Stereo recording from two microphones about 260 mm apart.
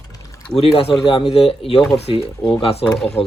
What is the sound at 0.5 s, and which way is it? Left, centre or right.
Speech, left.